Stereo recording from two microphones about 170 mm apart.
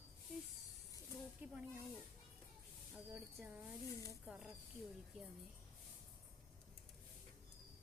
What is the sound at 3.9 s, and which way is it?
Speech, 20° left (ahead or behind).